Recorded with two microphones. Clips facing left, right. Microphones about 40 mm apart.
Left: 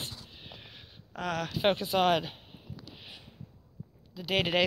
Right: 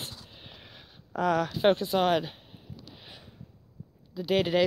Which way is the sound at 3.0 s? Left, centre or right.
Centre.